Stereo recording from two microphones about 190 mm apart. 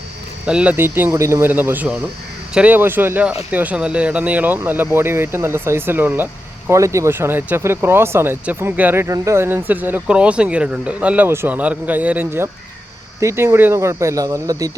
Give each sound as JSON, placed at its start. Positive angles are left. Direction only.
{"t": 0.4, "sound": "speech", "side_deg": -5}